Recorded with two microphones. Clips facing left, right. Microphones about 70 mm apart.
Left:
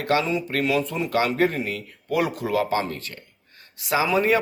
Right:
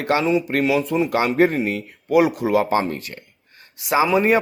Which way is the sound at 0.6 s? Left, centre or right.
Centre.